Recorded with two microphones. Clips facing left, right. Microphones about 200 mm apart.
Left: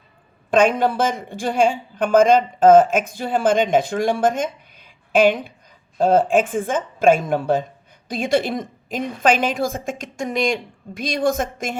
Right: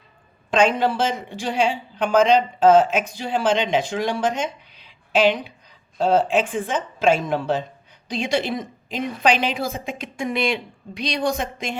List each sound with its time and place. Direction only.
0.5 s a woman's voice: 50° left (ahead or behind)